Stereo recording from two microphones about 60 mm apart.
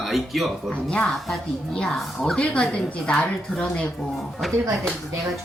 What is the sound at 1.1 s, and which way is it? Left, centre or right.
Speech, centre.